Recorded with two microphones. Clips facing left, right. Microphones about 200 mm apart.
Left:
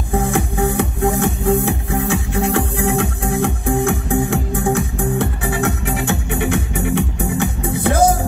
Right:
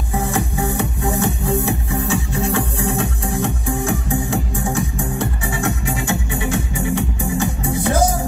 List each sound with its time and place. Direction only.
0.1 s music: 55° left (ahead or behind)